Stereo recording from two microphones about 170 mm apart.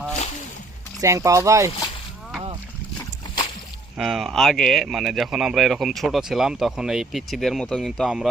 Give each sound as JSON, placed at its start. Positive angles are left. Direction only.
{"t": 1.0, "sound": "speech", "side_deg": -20}
{"t": 3.9, "sound": "speech", "side_deg": -5}